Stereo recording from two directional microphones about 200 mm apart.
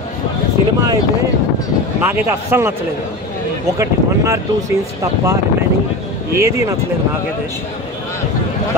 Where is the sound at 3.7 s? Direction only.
15° right (ahead or behind).